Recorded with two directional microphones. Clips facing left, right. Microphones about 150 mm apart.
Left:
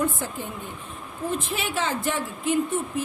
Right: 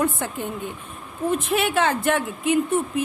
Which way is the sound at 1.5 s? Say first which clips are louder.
Right 6 dB; 60° right (ahead or behind).